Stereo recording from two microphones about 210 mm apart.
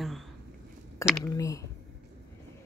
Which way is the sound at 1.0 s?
15° left (ahead or behind).